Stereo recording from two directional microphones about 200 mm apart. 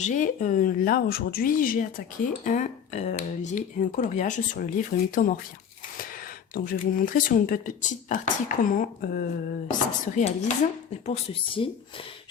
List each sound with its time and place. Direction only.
0.0 s speech: 40° left (ahead or behind)
6.5 s speech: 45° left (ahead or behind); by 11.7 s 25° left (ahead or behind)